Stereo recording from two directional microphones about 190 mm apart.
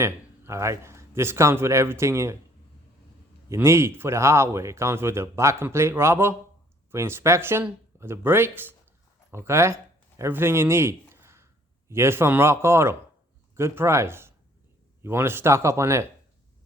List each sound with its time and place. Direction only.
0.0 s a man's voice: 15° right (ahead or behind)
3.5 s a man's voice: 15° right (ahead or behind)